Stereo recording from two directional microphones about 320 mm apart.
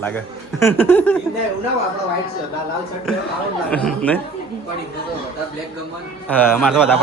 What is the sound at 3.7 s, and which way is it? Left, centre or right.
Speech, centre.